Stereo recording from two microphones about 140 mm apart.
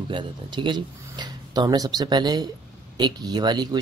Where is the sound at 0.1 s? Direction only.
35° right (ahead or behind).